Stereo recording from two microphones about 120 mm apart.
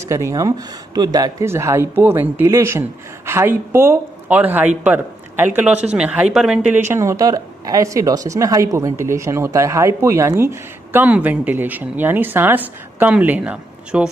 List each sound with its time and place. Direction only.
0.0 s a woman's voice: 25° right (ahead or behind); by 6.6 s 5° right (ahead or behind)
6.9 s a woman's voice: 25° right (ahead or behind)